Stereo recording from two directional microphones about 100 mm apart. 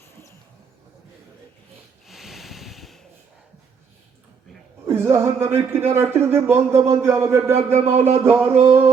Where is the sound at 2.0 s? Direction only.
Centre (ahead or behind).